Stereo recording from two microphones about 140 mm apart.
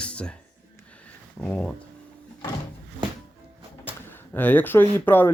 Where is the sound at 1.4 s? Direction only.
10° left (ahead or behind).